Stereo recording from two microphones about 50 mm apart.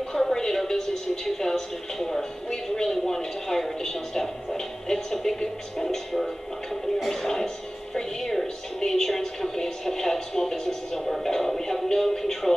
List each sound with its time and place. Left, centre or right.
0.1 s a woman's voice: centre